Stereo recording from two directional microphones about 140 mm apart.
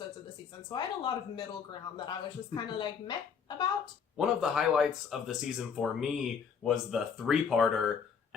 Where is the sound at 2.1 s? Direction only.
30° left (ahead or behind).